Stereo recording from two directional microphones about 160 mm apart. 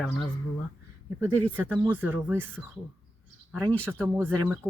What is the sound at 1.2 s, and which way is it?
Speech, 10° right (ahead or behind).